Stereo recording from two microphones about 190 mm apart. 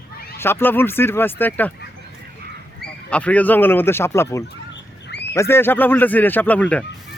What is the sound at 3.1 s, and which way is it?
Speech, 5° left (ahead or behind).